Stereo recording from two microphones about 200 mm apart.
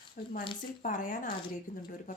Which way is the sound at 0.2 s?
45° left (ahead or behind).